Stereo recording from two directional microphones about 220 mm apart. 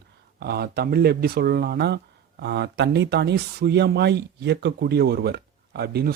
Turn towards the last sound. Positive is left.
turn(degrees=-45)  # may be behind; listen again after turning